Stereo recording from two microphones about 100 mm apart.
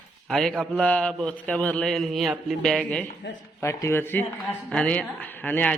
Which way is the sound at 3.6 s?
25° left (ahead or behind).